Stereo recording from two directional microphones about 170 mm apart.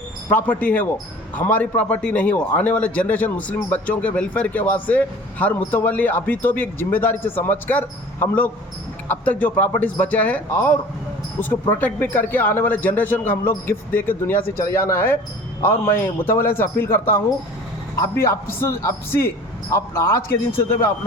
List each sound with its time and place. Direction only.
0.3 s a man's voice: 10° left (ahead or behind)
11.8 s a man's voice: 10° left (ahead or behind)